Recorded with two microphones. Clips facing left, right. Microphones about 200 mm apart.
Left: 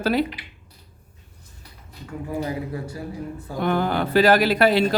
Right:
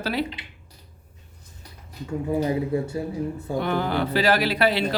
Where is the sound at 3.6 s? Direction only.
50° left (ahead or behind).